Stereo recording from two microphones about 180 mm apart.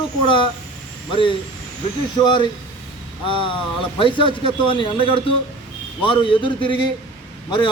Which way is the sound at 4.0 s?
25° left (ahead or behind).